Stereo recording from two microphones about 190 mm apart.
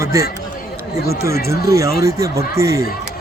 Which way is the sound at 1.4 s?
15° right (ahead or behind).